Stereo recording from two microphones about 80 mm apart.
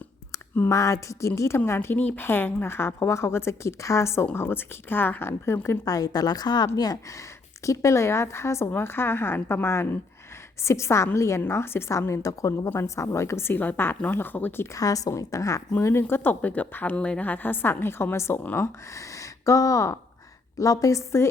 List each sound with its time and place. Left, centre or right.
0.7 s a woman's voice: left
5.6 s a woman's voice: left
14.7 s a woman's voice: left